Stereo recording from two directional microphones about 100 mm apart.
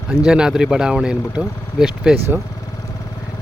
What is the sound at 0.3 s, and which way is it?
Speech, 5° right (ahead or behind).